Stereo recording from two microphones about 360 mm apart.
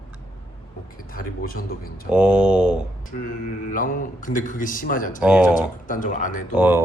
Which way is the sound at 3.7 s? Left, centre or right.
Left.